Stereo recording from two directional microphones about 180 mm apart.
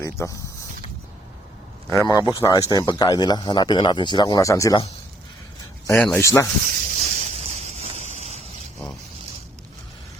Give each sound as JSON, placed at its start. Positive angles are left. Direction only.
{"t": 0.0, "sound": "speech", "side_deg": 15}
{"t": 2.0, "sound": "speech", "side_deg": 20}
{"t": 5.9, "sound": "speech", "side_deg": 5}
{"t": 6.1, "sound": "speech", "side_deg": 15}
{"t": 6.8, "sound": "a sound", "side_deg": -45}